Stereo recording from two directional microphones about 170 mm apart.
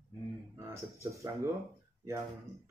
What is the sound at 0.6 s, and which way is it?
Speech, 15° right (ahead or behind).